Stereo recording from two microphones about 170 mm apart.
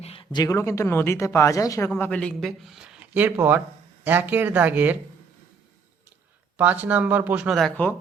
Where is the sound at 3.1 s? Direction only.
15° right (ahead or behind).